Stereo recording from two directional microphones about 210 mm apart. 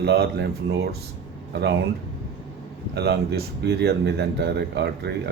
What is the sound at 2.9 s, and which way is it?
Speech, 50° right (ahead or behind).